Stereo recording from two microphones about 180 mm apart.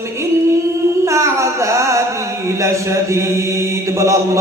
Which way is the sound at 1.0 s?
15° right (ahead or behind).